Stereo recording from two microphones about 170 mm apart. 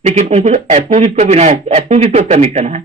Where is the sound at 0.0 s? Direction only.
40° right (ahead or behind).